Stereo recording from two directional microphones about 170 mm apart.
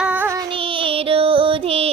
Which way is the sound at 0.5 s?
30° right (ahead or behind).